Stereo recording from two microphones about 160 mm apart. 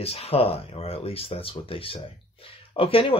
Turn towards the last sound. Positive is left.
turn(degrees=35)  # may be behind; listen again after turning